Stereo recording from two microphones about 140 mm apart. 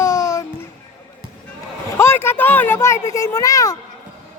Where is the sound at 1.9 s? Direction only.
15° left (ahead or behind).